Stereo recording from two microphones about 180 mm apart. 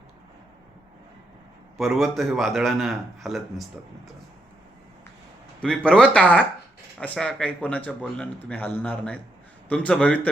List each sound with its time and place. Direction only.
1.8 s a man's voice: centre (ahead or behind)
5.5 s speech: 5° left (ahead or behind)